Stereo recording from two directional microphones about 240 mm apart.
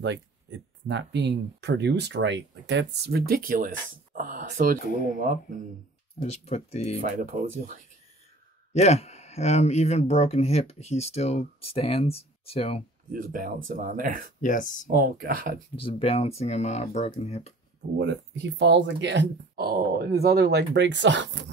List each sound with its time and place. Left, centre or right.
0.8 s speech: right
6.4 s speech: left
7.1 s speech: right
8.7 s speech: left
13.1 s speech: right
14.4 s speech: left
14.9 s speech: right
15.8 s speech: left
17.9 s speech: right